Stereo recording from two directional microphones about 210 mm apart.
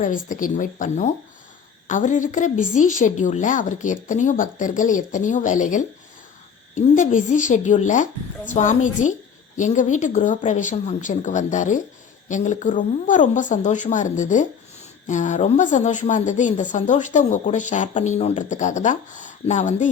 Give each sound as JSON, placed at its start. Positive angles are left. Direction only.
{"t": 0.0, "sound": "a woman's voice", "side_deg": 40}